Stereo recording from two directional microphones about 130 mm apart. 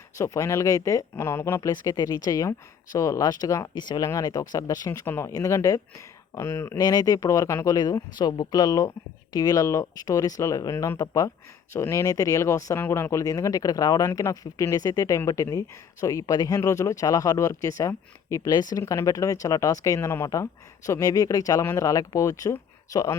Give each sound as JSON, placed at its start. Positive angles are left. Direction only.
{"t": 0.2, "sound": "speech", "side_deg": 20}